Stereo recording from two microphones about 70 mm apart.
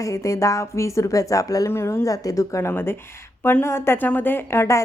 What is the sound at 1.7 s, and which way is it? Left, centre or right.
A woman's voice, left.